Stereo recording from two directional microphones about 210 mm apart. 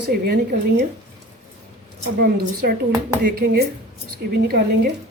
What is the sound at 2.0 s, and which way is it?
Speech, 50° right (ahead or behind).